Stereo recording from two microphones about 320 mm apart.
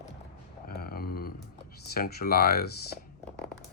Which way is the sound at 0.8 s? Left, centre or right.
Left.